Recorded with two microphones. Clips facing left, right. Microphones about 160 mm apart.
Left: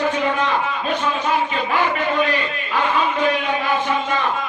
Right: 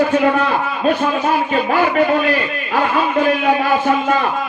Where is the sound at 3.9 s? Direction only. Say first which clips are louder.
Right 5 dB; 50° right (ahead or behind).